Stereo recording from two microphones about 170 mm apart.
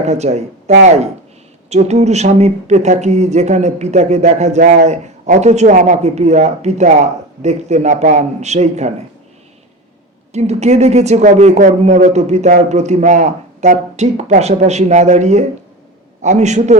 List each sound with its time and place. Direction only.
0.0 s speech: 40° right (ahead or behind)
10.3 s speech: 40° right (ahead or behind)